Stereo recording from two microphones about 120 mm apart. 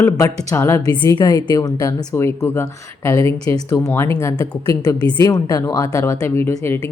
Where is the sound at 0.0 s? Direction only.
25° left (ahead or behind).